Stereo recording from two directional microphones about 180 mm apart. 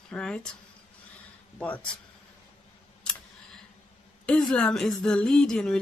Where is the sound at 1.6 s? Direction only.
5° left (ahead or behind).